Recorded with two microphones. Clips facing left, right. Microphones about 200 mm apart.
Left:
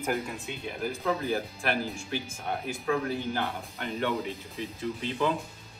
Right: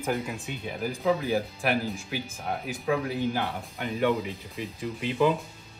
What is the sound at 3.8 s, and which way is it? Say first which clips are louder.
Speech: right 4 dB; 15° right (ahead or behind).